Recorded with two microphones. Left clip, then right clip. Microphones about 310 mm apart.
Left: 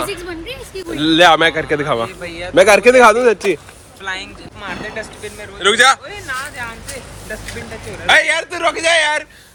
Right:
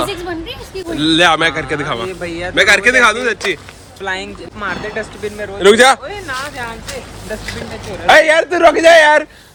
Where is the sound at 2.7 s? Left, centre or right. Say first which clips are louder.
Left 1 dB; left.